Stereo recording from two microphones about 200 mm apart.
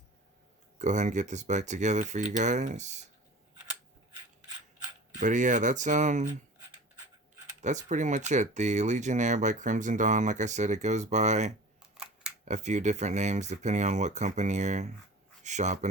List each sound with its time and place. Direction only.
0.8 s speech: 35° right (ahead or behind)
5.2 s speech: 40° right (ahead or behind)
7.6 s speech: 35° right (ahead or behind)
11.8 s camera: 5° right (ahead or behind)
12.5 s speech: 35° right (ahead or behind)